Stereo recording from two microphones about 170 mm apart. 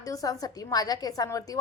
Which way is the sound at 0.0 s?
20° left (ahead or behind).